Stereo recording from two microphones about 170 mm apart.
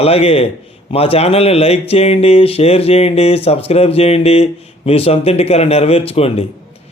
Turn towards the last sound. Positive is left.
turn(degrees=35)  # may be behind; listen again after turning